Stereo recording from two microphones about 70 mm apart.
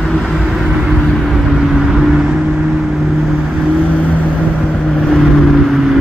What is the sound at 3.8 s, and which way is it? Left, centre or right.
Vehicle, centre.